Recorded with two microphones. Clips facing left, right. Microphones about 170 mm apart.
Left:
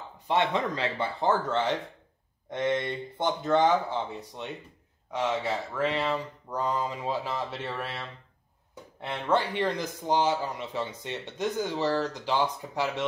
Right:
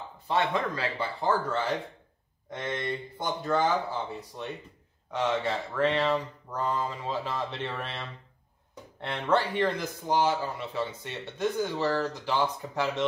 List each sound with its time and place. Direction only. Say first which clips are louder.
0.3 s speech: left 1 dB; 20° left (ahead or behind)
5.8 s speech: right 4 dB; 5° left (ahead or behind)
9.0 s speech: even; 10° left (ahead or behind)